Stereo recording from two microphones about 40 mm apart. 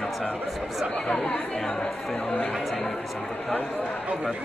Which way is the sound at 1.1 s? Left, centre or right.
Centre.